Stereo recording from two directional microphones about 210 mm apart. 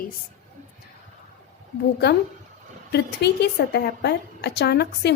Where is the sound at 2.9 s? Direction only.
50° left (ahead or behind).